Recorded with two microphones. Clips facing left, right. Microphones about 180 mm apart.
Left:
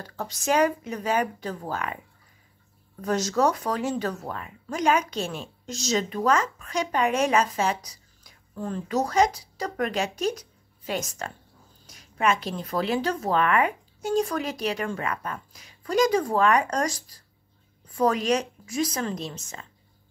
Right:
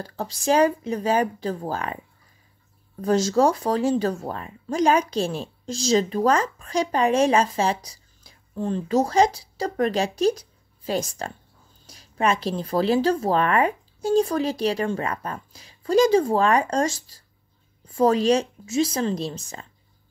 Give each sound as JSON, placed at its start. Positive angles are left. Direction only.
{"t": 0.0, "sound": "speech", "side_deg": -30}
{"t": 3.0, "sound": "speech", "side_deg": -30}